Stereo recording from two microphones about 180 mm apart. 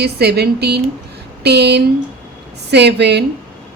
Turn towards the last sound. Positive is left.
turn(degrees=-70)  # may be behind; listen again after turning